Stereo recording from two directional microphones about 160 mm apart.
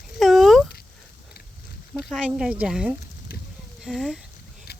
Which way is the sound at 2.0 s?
5° right (ahead or behind).